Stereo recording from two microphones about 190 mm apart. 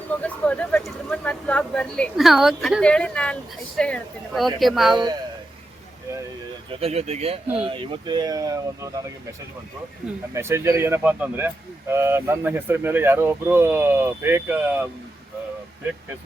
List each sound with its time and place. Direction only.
0.2 s speech: 5° left (ahead or behind)
6.7 s speech: 30° right (ahead or behind)
10.3 s speech: 15° right (ahead or behind)